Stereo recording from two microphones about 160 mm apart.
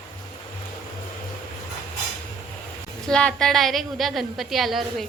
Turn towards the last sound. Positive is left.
turn(degrees=0)  # may be behind; listen again after turning